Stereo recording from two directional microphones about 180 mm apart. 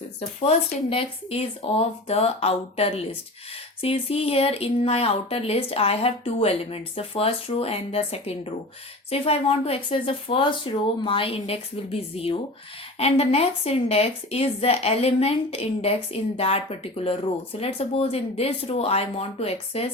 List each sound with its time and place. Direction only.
0.4 s speech: 30° left (ahead or behind)